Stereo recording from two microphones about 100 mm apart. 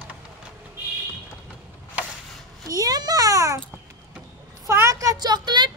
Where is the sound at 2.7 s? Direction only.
40° right (ahead or behind).